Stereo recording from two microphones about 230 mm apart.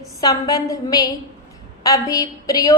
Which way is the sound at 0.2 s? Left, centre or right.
Centre.